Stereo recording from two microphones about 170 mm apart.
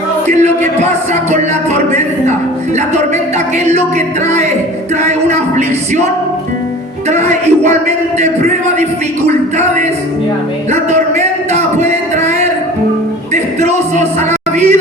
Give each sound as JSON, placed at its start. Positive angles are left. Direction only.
{"t": 0.3, "sound": "a man's voice", "side_deg": -40}
{"t": 2.7, "sound": "a man's voice", "side_deg": -40}
{"t": 7.1, "sound": "a man's voice", "side_deg": -40}
{"t": 10.7, "sound": "music", "side_deg": -40}
{"t": 13.3, "sound": "a man's voice", "side_deg": -40}